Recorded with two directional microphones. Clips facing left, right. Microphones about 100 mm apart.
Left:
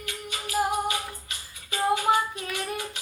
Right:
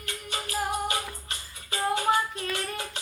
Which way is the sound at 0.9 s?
40° right (ahead or behind).